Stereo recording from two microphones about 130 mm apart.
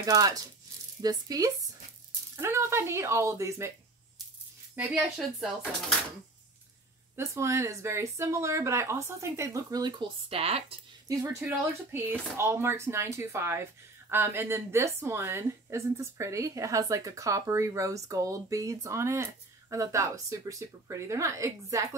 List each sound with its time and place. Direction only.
0.0 s speech: 30° right (ahead or behind)
4.9 s speech: centre (ahead or behind)
7.2 s speech: 20° right (ahead or behind); by 10.8 s 50° right (ahead or behind)
11.1 s speech: 20° right (ahead or behind)